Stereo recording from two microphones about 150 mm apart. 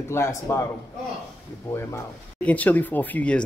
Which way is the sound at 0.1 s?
20° left (ahead or behind).